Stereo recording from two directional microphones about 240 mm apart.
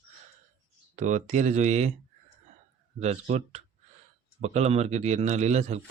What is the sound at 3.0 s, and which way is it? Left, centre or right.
Speech, right.